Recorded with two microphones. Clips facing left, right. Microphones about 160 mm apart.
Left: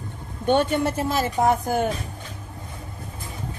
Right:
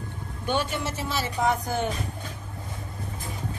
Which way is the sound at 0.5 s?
55° left (ahead or behind).